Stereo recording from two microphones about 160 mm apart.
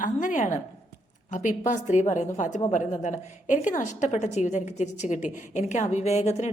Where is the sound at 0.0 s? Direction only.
55° left (ahead or behind).